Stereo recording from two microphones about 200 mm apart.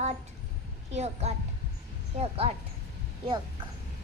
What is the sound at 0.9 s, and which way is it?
A child's voice, 35° right (ahead or behind).